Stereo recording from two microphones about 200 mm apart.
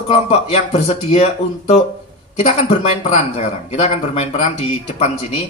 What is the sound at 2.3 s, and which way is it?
Speech, 30° left (ahead or behind).